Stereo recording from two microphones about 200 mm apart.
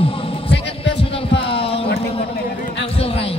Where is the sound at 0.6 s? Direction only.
60° left (ahead or behind).